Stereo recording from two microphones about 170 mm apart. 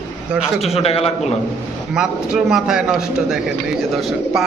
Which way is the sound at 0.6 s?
35° left (ahead or behind).